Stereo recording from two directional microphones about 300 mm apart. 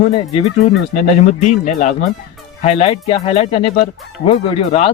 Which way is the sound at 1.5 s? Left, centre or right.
Left.